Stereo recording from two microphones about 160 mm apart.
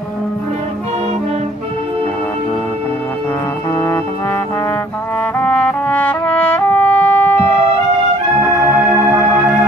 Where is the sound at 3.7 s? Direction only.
15° left (ahead or behind).